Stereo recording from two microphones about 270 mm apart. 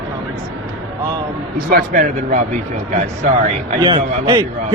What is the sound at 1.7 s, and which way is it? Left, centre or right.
A man's voice, right.